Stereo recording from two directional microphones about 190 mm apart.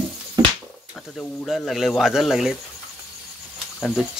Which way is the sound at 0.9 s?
Centre (ahead or behind).